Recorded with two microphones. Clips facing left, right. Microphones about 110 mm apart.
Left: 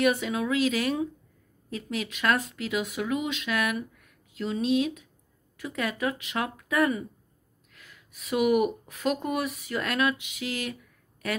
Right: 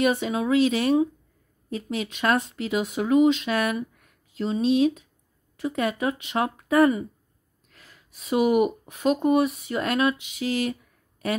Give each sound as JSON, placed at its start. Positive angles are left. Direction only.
{"t": 0.0, "sound": "speech", "side_deg": -25}